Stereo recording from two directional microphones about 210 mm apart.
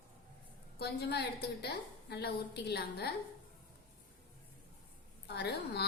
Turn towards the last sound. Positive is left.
turn(degrees=50)  # may be behind; listen again after turning